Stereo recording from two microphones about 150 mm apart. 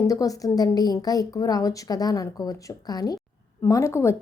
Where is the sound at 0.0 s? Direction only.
25° left (ahead or behind).